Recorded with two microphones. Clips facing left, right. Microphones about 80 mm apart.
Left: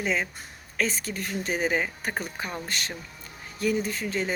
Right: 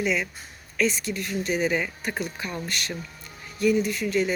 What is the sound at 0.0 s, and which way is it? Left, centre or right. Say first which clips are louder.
Speech: right 2 dB; left.